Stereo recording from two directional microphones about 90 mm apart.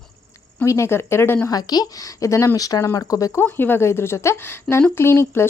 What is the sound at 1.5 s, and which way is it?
Speech, 45° left (ahead or behind).